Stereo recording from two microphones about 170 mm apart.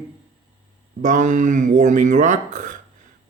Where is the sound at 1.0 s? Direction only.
50° right (ahead or behind).